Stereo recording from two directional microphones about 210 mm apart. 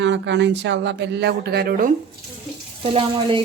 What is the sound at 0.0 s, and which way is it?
Speech, 60° right (ahead or behind).